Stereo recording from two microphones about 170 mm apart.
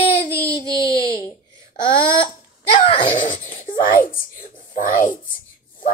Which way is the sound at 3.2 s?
50° left (ahead or behind).